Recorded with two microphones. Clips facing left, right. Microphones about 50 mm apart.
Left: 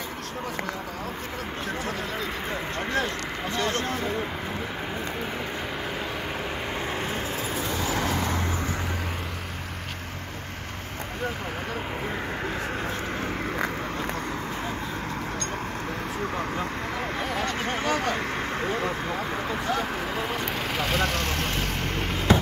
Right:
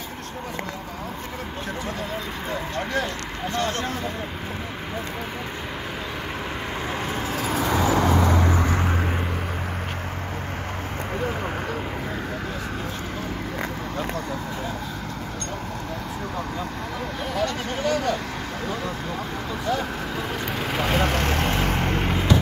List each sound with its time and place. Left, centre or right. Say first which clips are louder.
7.3 s vehicle: right 5 dB; right
17.4 s a sound: right 5 dB; left
20.7 s vehicle: right 4 dB; centre
21.0 s vehicle: right 4 dB; right
21.8 s vehicle: right 4 dB; centre